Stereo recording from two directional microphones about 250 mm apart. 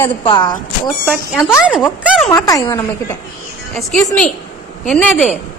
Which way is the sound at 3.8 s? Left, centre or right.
Centre.